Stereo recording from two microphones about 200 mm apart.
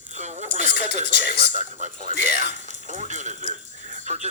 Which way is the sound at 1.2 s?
35° right (ahead or behind).